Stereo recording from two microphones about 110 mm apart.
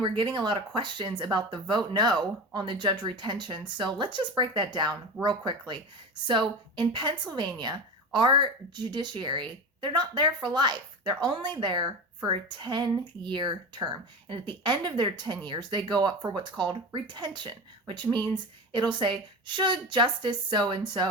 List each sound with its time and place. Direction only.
0.2 s a woman's voice: 45° right (ahead or behind)
5.2 s speech: 5° right (ahead or behind)
5.5 s a woman's voice: 45° right (ahead or behind)